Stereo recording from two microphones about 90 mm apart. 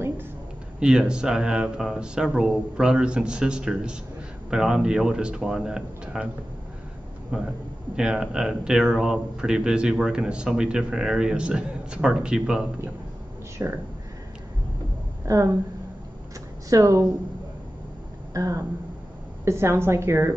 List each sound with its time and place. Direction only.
0.7 s speech: 10° right (ahead or behind)
7.3 s speech: 10° right (ahead or behind)
13.6 s speech: 30° right (ahead or behind)
15.2 s a woman's voice: 40° right (ahead or behind)
16.6 s speech: 40° right (ahead or behind)
18.3 s a woman's voice: 40° right (ahead or behind)